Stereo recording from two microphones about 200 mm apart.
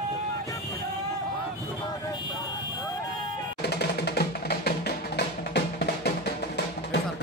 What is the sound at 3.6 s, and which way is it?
Music, 55° left (ahead or behind).